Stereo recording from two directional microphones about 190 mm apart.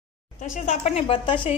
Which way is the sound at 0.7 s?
35° left (ahead or behind).